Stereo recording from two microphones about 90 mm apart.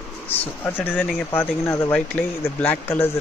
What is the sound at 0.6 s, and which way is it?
Speech, 20° left (ahead or behind).